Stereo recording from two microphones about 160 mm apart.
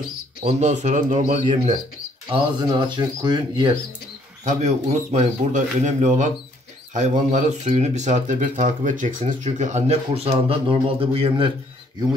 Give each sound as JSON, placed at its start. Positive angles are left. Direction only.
{"t": 0.4, "sound": "speech", "side_deg": -45}
{"t": 2.3, "sound": "speech", "side_deg": -30}
{"t": 4.5, "sound": "speech", "side_deg": -50}